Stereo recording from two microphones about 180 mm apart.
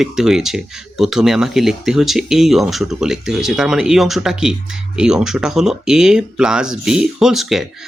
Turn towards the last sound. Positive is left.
turn(degrees=0)  # may be behind; listen again after turning